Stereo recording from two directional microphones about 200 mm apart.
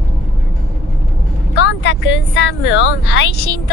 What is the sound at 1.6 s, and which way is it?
Speech, 60° left (ahead or behind).